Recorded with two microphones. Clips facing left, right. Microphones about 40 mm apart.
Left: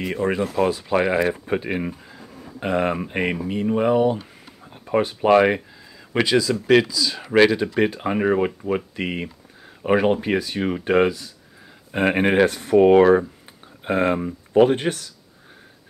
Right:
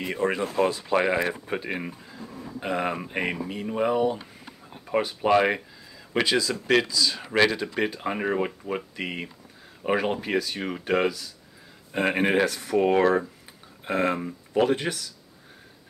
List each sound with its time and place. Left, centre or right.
0.0 s speech: centre
6.2 s speech: centre; by 15.0 s left